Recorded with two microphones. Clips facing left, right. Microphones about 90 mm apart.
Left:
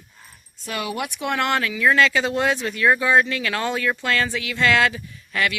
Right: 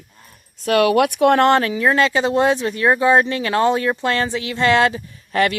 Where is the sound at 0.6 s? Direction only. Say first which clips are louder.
Right 13 dB; 70° right (ahead or behind).